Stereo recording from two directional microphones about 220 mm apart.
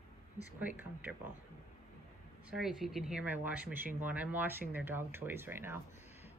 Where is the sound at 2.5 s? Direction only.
Centre (ahead or behind).